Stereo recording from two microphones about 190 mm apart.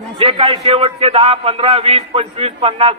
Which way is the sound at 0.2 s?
30° right (ahead or behind).